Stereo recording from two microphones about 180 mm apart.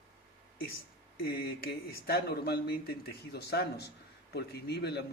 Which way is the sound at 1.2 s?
60° left (ahead or behind).